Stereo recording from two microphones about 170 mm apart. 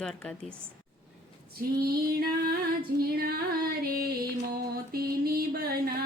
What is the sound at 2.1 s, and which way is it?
Music, 60° right (ahead or behind).